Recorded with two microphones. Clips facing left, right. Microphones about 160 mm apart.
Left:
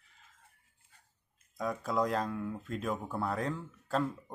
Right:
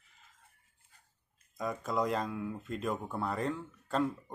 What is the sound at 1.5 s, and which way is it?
Speech, centre (ahead or behind).